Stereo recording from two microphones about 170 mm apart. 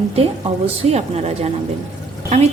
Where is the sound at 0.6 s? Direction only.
40° right (ahead or behind).